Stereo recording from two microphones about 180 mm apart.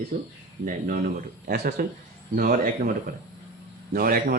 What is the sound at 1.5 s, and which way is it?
Speech, 55° right (ahead or behind).